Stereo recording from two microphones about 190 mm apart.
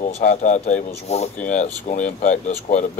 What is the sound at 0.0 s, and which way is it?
Speech, 35° left (ahead or behind).